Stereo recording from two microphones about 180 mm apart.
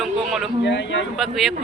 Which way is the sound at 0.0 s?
Centre (ahead or behind).